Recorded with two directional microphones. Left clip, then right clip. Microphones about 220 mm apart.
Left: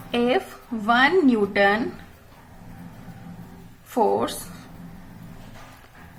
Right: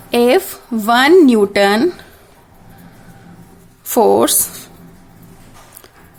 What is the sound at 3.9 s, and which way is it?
Speech, 50° right (ahead or behind).